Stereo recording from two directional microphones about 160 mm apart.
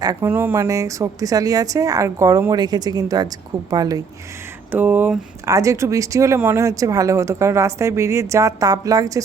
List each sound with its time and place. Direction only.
0.0 s speech: 25° right (ahead or behind)
0.3 s speech: 10° right (ahead or behind)
4.7 s speech: 10° right (ahead or behind)